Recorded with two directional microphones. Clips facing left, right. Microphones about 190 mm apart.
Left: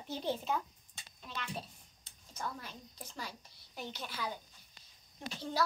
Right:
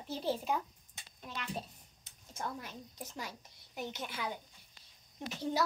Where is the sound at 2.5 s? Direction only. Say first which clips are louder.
Right 3 dB; 20° right (ahead or behind).